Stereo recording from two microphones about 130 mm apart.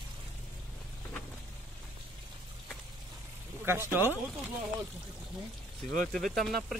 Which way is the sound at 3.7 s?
20° right (ahead or behind).